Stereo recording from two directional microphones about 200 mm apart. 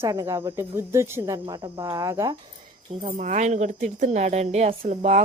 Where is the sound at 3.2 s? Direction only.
35° right (ahead or behind).